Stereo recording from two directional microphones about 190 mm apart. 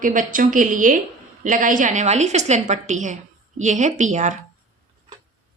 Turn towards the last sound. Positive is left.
turn(degrees=-40)  # may be behind; listen again after turning